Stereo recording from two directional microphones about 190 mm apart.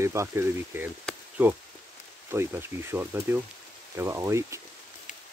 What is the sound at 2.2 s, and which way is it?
Speech, 15° right (ahead or behind).